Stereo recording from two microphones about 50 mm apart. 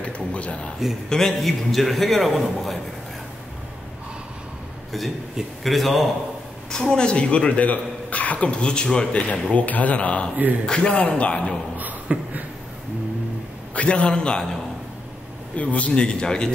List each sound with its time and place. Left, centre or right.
0.0 s speech: left
1.0 s a man's voice: centre
5.6 s a man's voice: centre
6.7 s a man's voice: centre
9.3 s a man's voice: left
11.7 s beatboxing: right
13.7 s speech: left
15.5 s speech: left